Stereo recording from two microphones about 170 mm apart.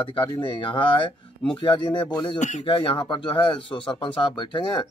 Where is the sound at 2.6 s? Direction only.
30° left (ahead or behind).